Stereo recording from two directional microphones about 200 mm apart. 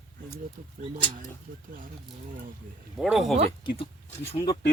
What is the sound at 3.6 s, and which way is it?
Speech, 25° left (ahead or behind).